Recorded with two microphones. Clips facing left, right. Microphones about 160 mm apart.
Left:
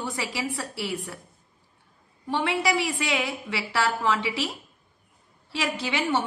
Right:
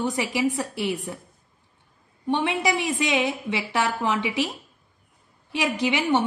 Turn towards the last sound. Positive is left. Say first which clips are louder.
# right 4 dB
turn(degrees=-15)  # may be behind; listen again after turning